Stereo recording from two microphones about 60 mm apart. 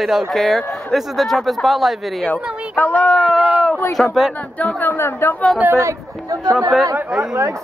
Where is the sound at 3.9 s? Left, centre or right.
Centre.